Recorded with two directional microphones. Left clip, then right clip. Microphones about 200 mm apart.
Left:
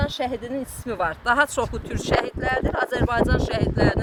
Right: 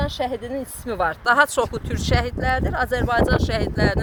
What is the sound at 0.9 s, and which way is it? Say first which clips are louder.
Speech: right 3 dB; 30° right (ahead or behind).